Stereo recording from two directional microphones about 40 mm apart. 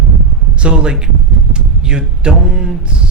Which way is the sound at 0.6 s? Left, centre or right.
Right.